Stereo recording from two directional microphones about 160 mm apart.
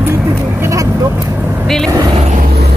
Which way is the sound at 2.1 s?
40° right (ahead or behind).